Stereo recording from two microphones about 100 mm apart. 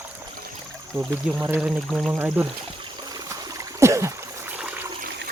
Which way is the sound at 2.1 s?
15° right (ahead or behind).